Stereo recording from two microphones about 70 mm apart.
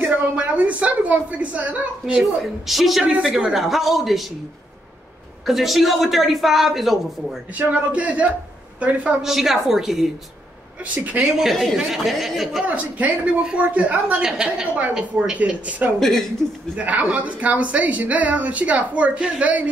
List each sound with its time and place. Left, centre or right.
0.0 s a woman's voice: right
2.6 s a man's voice: centre
5.5 s a man's voice: centre
7.5 s a woman's voice: centre
9.2 s a man's voice: centre
11.3 s a man's voice: centre
12.6 s a woman's voice: right
15.3 s speech: right
16.0 s a man's voice: centre
16.7 s speech: right